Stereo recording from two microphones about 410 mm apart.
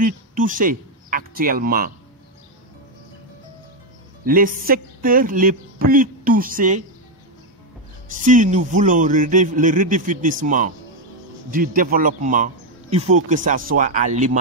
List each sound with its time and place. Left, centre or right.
0.0 s speech: centre
4.2 s speech: right
8.1 s speech: centre